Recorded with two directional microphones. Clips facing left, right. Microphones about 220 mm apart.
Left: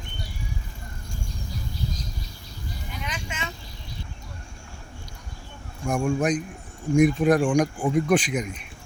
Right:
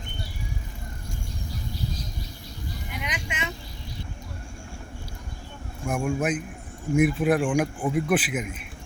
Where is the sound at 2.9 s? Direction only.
15° right (ahead or behind).